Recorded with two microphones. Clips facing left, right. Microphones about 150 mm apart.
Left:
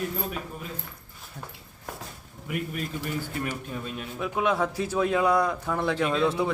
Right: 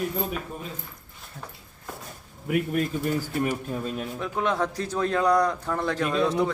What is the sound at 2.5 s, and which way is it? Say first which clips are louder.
Speech: right 7 dB; 50° right (ahead or behind).